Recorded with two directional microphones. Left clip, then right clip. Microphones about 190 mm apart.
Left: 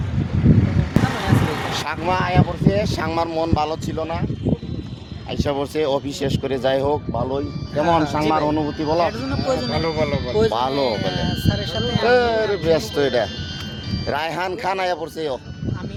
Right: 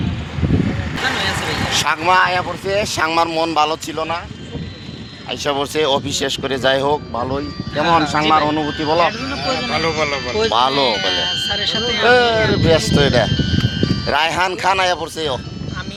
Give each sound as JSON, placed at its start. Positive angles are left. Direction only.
{"t": 1.0, "sound": "vehicle", "side_deg": -45}
{"t": 1.8, "sound": "speech", "side_deg": -10}
{"t": 5.4, "sound": "speech", "side_deg": -10}
{"t": 10.5, "sound": "speech", "side_deg": -10}
{"t": 13.3, "sound": "music", "side_deg": -35}
{"t": 14.1, "sound": "speech", "side_deg": -5}